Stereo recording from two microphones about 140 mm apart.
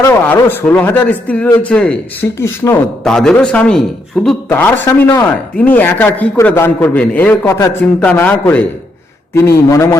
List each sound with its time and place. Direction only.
0.0 s speech: 15° left (ahead or behind)
2.4 s a man's voice: 20° left (ahead or behind)
3.0 s a man's voice: 5° left (ahead or behind); by 10.0 s 20° left (ahead or behind)